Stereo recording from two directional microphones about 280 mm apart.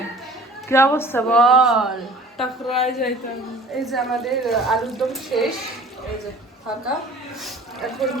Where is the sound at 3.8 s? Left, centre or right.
Centre.